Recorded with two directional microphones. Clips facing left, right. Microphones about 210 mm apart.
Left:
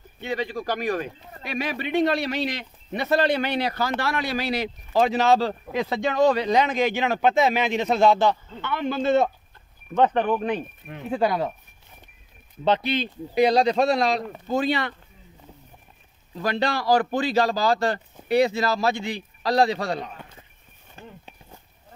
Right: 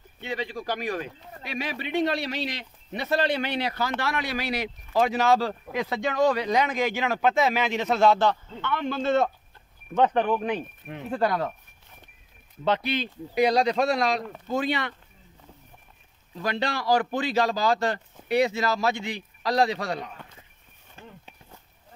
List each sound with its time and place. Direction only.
0.2 s speech: 45° left (ahead or behind); by 10.6 s 5° right (ahead or behind)
11.1 s speech: 10° left (ahead or behind)
12.6 s a man's voice: 25° left (ahead or behind)
16.3 s a man's voice: 40° left (ahead or behind)